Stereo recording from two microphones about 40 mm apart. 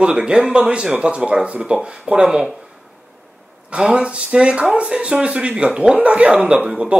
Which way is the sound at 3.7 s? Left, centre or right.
Right.